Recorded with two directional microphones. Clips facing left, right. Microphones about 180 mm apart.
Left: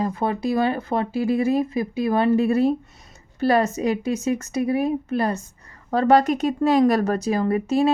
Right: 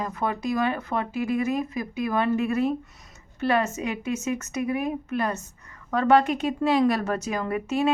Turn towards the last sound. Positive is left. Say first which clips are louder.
# left 5 dB
turn(degrees=35)  # may be behind; listen again after turning